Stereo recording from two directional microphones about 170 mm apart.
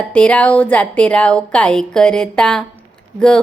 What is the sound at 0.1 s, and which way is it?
A woman's voice, 5° left (ahead or behind).